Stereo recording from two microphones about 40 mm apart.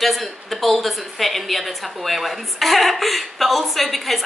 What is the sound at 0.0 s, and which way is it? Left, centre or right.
Speech, centre.